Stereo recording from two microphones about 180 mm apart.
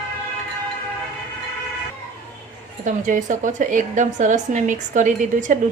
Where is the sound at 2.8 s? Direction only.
45° right (ahead or behind).